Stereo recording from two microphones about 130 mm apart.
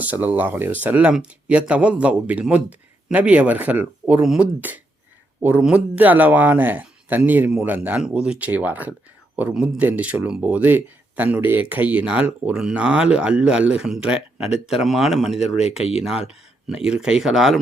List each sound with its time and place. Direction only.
0.0 s speech: 15° right (ahead or behind)
15.4 s speech: 55° left (ahead or behind)
16.0 s speech: 5° right (ahead or behind)